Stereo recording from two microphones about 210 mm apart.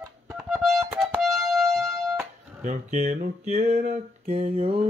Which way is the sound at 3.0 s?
45° right (ahead or behind).